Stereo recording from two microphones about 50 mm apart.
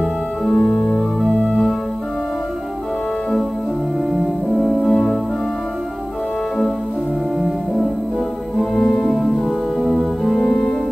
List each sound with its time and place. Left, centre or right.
0.0 s organ: centre
4.1 s music: centre
7.3 s music: centre
8.7 s music: centre
9.8 s organ: centre
10.4 s music: centre